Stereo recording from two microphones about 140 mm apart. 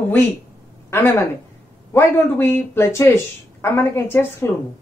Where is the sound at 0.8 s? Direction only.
20° left (ahead or behind).